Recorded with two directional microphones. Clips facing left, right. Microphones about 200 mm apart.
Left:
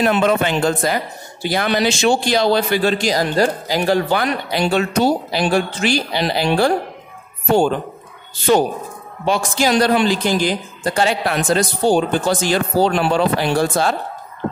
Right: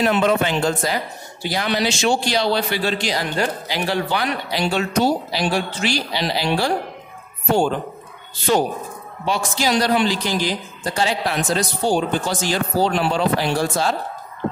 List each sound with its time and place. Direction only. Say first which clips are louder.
0.0 s speech: left 2 dB; 55° left (ahead or behind)
9.2 s speech: left 4 dB; 50° left (ahead or behind)